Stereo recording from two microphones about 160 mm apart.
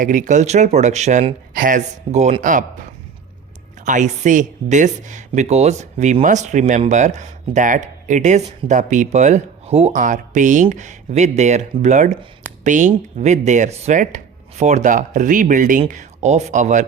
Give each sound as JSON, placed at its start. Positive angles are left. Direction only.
{"t": 0.0, "sound": "speech", "side_deg": -55}
{"t": 3.8, "sound": "speech", "side_deg": -50}